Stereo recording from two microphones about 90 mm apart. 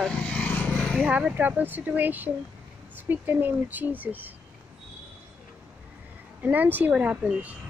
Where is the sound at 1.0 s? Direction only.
10° right (ahead or behind).